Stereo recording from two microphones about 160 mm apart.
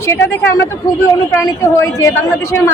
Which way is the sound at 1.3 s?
15° left (ahead or behind).